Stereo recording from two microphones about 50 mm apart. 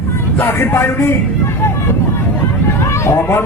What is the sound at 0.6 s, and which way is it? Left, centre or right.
Music, left.